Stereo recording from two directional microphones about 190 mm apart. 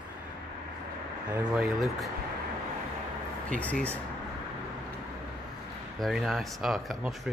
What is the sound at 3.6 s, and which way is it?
Speech, 5° left (ahead or behind).